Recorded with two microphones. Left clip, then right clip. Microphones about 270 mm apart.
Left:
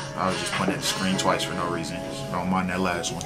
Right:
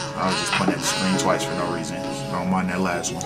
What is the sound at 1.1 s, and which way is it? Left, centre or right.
Speech, centre.